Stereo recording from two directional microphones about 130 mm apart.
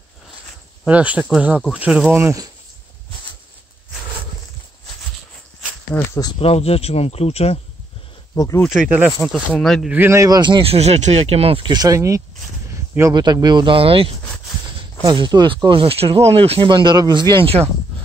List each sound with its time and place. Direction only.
0.8 s speech: 10° right (ahead or behind)
5.9 s speech: 25° left (ahead or behind)
6.4 s speech: 50° left (ahead or behind)
8.4 s speech: 25° left (ahead or behind)
8.6 s speech: 5° right (ahead or behind)
9.2 s speech: centre (ahead or behind)
9.8 s speech: 15° right (ahead or behind); by 11.7 s 45° right (ahead or behind)
11.7 s speech: 25° right (ahead or behind); by 14.1 s 45° right (ahead or behind)
15.0 s speech: 35° right (ahead or behind)